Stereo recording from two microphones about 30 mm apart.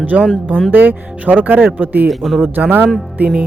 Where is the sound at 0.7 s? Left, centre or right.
Right.